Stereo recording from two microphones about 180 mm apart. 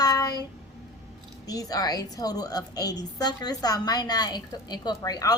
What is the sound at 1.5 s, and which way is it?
A woman's voice, 20° left (ahead or behind).